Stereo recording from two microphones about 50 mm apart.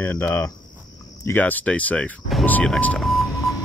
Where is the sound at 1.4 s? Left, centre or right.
Left.